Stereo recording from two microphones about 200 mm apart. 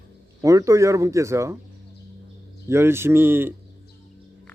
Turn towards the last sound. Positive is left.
turn(degrees=-10)  # may be behind; listen again after turning